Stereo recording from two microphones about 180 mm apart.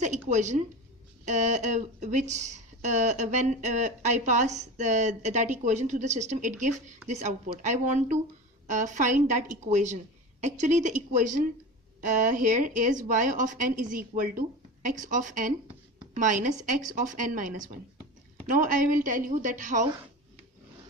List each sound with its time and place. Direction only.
0.3 s speech: 40° right (ahead or behind)